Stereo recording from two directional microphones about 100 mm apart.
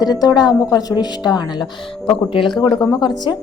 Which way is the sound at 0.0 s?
40° left (ahead or behind).